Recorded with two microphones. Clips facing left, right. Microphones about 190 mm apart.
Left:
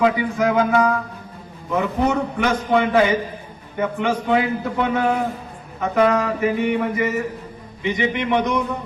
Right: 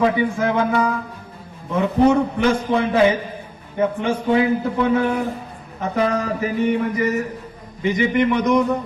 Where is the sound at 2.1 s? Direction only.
30° right (ahead or behind).